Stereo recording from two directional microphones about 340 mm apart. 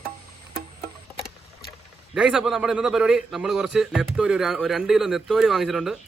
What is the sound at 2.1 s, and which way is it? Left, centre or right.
A man's voice, centre.